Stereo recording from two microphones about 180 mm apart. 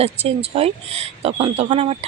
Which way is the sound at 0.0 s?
35° right (ahead or behind).